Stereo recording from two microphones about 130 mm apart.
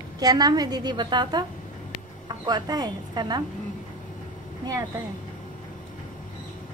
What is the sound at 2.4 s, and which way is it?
Speech, 30° right (ahead or behind).